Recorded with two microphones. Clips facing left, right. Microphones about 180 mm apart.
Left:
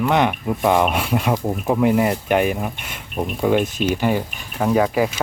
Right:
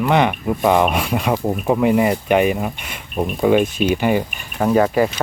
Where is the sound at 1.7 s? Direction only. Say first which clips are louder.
Right 1 dB; centre (ahead or behind).